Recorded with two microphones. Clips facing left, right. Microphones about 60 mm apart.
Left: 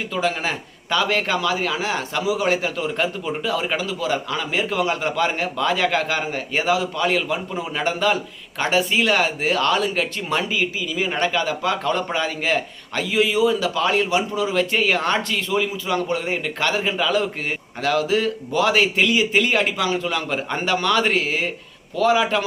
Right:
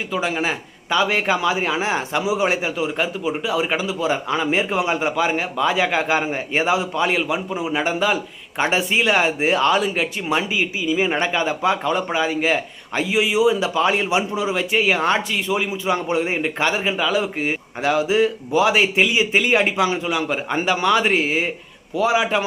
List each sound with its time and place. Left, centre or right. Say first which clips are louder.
0.1 s speech: right 1 dB; centre
8.5 s speech: even; right